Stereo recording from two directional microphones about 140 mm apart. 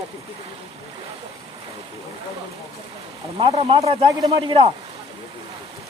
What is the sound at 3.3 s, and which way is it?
Speech, 40° right (ahead or behind).